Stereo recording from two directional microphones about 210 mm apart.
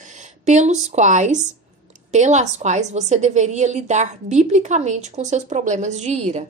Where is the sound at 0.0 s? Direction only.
35° right (ahead or behind).